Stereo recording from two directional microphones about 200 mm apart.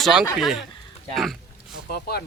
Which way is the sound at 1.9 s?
50° left (ahead or behind).